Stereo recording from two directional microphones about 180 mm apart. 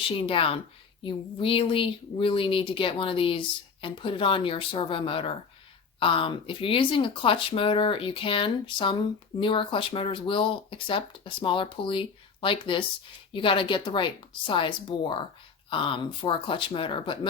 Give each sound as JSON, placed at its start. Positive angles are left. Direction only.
{"t": 0.0, "sound": "a woman's voice", "side_deg": 30}